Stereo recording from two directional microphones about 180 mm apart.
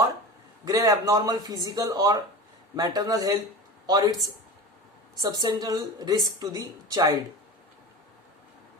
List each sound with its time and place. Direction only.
0.6 s speech: 20° right (ahead or behind)
5.2 s speech: 20° right (ahead or behind)